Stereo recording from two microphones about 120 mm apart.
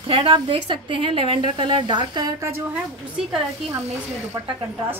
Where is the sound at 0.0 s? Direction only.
45° right (ahead or behind).